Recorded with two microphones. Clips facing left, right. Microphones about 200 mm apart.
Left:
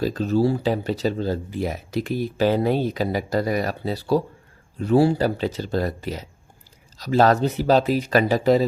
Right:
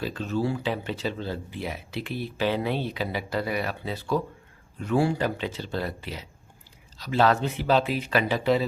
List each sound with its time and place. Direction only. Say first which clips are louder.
0.0 s speech: left 7 dB; 40° left (ahead or behind)